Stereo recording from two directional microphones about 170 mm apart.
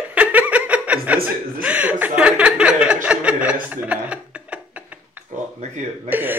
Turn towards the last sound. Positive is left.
turn(degrees=-10)  # may be behind; listen again after turning